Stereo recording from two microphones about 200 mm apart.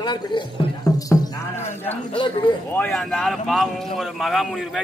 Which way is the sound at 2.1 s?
25° left (ahead or behind).